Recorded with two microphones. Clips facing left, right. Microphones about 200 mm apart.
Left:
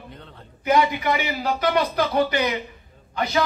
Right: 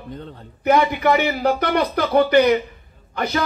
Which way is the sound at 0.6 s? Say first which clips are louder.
Right 3 dB; 55° right (ahead or behind).